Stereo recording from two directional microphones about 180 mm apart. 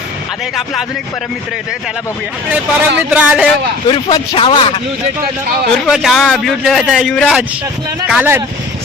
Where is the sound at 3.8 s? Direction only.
30° left (ahead or behind).